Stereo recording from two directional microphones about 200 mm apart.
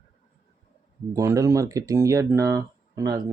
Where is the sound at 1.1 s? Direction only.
15° right (ahead or behind).